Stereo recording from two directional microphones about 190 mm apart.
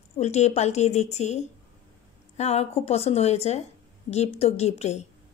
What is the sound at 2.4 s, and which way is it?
Speech, 35° left (ahead or behind).